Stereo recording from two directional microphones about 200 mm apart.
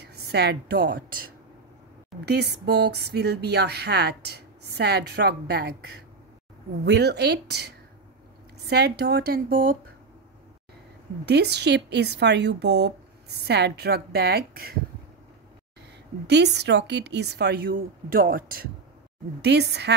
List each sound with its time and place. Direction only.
0.0 s a woman's voice: 55° right (ahead or behind)
2.2 s speech: 55° right (ahead or behind)
11.2 s speech: 55° right (ahead or behind)
16.3 s speech: 55° right (ahead or behind)
19.4 s speech: 55° right (ahead or behind)